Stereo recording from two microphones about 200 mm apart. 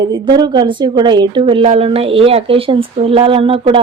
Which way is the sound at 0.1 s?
20° right (ahead or behind).